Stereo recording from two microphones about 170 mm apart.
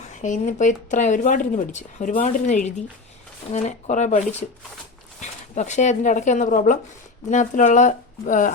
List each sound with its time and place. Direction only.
0.1 s speech: 45° left (ahead or behind)